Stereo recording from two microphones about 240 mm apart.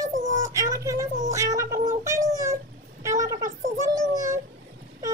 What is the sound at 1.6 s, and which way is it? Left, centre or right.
Cat, right.